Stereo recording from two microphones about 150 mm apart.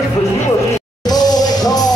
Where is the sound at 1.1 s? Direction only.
25° left (ahead or behind).